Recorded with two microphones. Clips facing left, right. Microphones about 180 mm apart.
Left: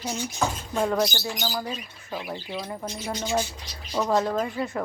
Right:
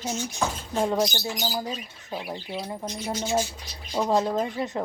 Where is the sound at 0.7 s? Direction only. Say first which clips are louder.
Even; 30° right (ahead or behind).